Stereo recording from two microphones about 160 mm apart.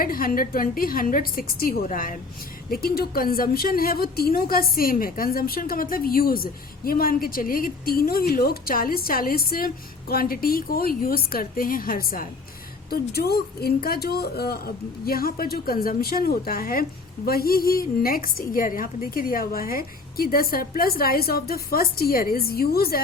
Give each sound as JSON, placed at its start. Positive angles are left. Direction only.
{"t": 0.0, "sound": "a woman's voice", "side_deg": 60}
{"t": 12.9, "sound": "a woman's voice", "side_deg": 75}